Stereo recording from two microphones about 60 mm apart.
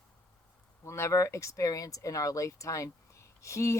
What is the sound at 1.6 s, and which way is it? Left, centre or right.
Speech, left.